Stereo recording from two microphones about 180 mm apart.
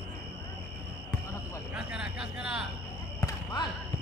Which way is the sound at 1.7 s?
5° right (ahead or behind).